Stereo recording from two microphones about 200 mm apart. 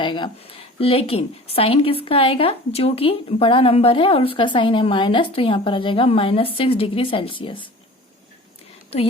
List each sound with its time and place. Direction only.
0.0 s a woman's voice: 25° left (ahead or behind)
8.9 s a woman's voice: 30° left (ahead or behind)